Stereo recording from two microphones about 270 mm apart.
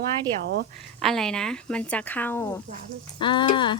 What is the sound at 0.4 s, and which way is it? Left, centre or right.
Speech, right.